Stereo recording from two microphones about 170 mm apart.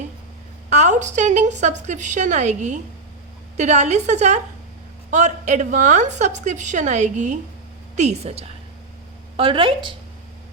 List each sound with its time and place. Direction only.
0.7 s a woman's voice: 45° right (ahead or behind)
9.4 s a woman's voice: 30° right (ahead or behind)